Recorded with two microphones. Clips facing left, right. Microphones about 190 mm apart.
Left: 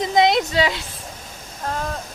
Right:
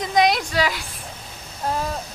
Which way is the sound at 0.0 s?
25° left (ahead or behind).